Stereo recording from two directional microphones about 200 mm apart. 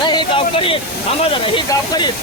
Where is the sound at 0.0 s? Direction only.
20° left (ahead or behind).